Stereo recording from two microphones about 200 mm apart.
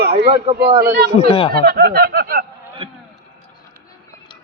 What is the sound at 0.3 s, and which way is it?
Speech, 25° right (ahead or behind).